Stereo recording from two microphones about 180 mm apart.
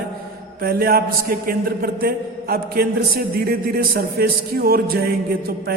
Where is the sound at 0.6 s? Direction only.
55° right (ahead or behind).